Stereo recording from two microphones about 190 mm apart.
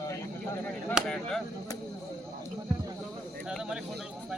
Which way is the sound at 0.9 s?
Centre (ahead or behind).